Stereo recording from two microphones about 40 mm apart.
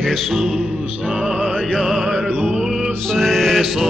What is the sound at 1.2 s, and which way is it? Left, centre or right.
Music, right.